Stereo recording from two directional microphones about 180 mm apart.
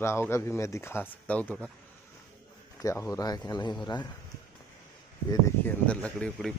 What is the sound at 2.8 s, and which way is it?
A man's voice, 15° left (ahead or behind).